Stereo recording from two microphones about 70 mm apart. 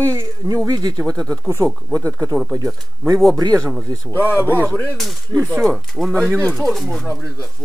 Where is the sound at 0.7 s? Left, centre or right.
Right.